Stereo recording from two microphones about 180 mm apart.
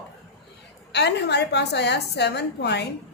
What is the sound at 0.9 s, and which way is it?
A woman's voice, 70° left (ahead or behind).